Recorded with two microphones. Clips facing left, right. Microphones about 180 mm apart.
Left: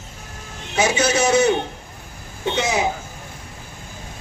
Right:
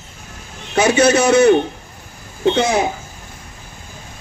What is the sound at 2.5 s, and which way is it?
Speech, 55° right (ahead or behind).